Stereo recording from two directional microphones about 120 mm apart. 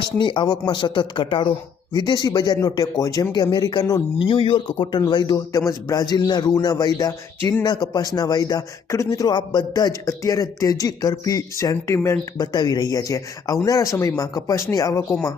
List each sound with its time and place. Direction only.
0.2 s speech: 40° left (ahead or behind)
4.2 s speech: 45° left (ahead or behind); by 12.1 s 25° left (ahead or behind)
12.4 s speech: 35° left (ahead or behind)